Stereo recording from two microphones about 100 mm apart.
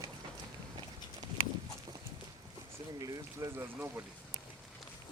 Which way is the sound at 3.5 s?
25° right (ahead or behind).